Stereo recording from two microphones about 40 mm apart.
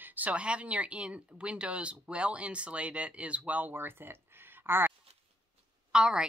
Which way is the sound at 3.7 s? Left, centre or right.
Right.